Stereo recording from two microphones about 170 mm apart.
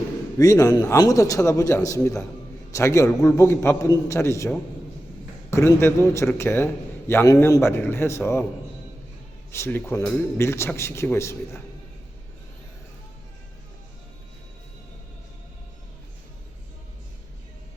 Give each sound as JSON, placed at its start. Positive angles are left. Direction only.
{"t": 0.3, "sound": "a man's voice", "side_deg": 20}
{"t": 9.5, "sound": "speech", "side_deg": 15}